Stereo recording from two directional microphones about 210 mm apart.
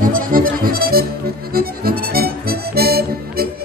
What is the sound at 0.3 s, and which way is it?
Music, 45° right (ahead or behind).